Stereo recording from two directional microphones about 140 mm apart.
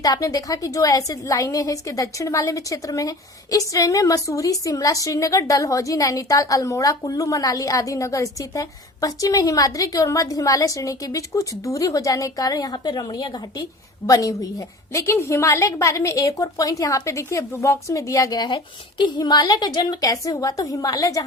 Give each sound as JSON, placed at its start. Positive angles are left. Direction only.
{"t": 0.0, "sound": "a woman's voice", "side_deg": 25}